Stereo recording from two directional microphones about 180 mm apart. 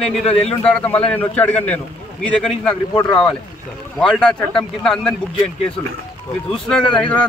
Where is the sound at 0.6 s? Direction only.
5° left (ahead or behind).